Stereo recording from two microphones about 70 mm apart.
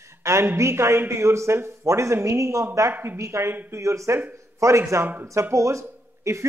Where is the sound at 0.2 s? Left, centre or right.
Right.